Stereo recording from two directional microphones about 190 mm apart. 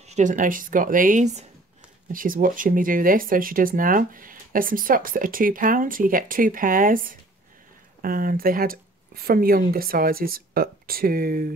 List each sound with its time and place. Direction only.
0.0 s speech: 40° right (ahead or behind)